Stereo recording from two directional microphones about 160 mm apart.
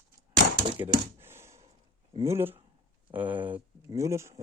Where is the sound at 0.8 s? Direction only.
15° right (ahead or behind).